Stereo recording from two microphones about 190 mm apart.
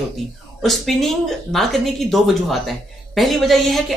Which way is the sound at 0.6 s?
Centre (ahead or behind).